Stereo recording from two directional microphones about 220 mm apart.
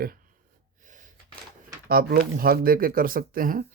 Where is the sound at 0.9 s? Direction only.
35° right (ahead or behind).